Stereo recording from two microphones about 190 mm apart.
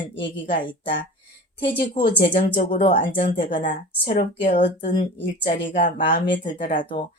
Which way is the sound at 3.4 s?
25° left (ahead or behind).